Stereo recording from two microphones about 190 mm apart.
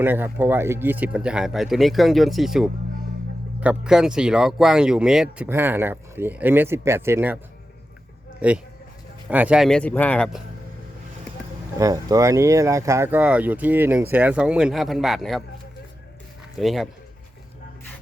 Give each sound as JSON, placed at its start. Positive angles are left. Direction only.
{"t": 0.0, "sound": "speech", "side_deg": -10}
{"t": 8.4, "sound": "a man's voice", "side_deg": -5}
{"t": 11.8, "sound": "speech", "side_deg": -20}
{"t": 16.6, "sound": "speech", "side_deg": 0}